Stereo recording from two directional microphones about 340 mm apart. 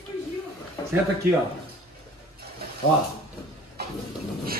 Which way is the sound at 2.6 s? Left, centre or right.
Right.